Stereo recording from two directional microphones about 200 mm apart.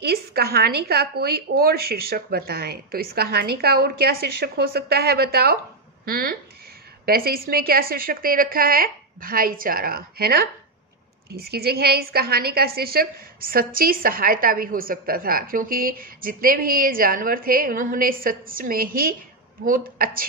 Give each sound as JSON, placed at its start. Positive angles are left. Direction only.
{"t": 0.0, "sound": "a woman's voice", "side_deg": -50}